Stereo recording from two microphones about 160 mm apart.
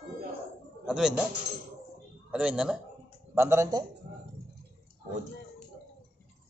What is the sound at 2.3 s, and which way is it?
Speech, 5° right (ahead or behind).